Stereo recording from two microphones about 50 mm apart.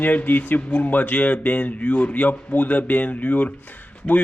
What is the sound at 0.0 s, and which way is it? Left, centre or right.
Speech, left.